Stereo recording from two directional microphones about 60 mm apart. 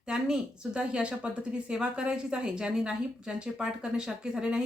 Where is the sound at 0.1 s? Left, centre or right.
Centre.